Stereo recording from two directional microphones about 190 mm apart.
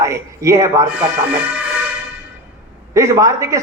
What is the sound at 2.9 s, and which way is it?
Speech, 15° right (ahead or behind).